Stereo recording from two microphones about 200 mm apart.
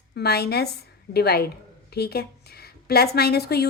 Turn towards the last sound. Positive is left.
turn(degrees=55)  # may be behind; listen again after turning